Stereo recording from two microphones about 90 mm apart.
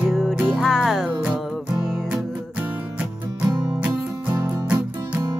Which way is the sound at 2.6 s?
15° right (ahead or behind).